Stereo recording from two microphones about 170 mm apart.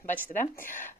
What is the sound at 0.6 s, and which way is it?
Speech, 50° left (ahead or behind).